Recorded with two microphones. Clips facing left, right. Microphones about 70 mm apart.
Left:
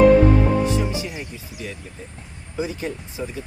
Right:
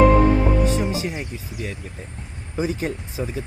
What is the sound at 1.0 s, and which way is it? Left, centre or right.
Speech, right.